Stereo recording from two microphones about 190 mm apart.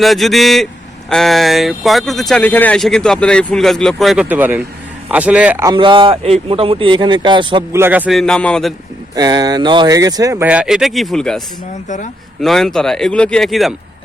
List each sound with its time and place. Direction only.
0.0 s speech: centre (ahead or behind)
5.7 s speech: 25° right (ahead or behind)
7.7 s speech: 10° right (ahead or behind); by 8.7 s 5° left (ahead or behind)
9.1 s speech: 20° right (ahead or behind); by 13.7 s centre (ahead or behind)